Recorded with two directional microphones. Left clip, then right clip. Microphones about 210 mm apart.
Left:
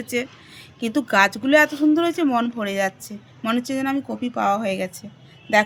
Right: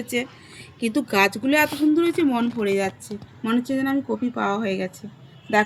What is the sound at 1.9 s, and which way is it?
A woman's voice, 25° left (ahead or behind).